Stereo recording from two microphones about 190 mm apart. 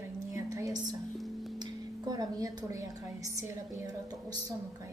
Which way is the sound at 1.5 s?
20° right (ahead or behind).